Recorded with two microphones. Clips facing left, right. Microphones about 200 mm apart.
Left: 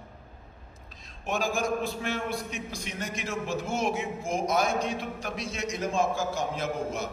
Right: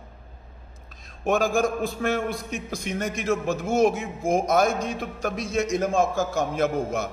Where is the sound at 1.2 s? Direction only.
50° right (ahead or behind).